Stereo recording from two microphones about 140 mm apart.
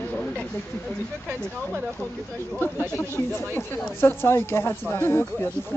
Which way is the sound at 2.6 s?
15° left (ahead or behind).